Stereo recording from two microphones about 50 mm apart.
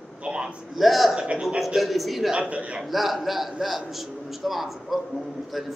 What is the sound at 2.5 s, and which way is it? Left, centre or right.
Speech, right.